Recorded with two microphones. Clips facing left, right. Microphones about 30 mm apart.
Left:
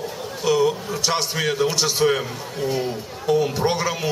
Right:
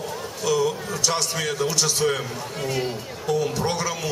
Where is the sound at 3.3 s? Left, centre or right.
Centre.